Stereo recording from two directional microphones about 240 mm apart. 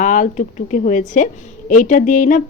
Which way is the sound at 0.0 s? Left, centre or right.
Left.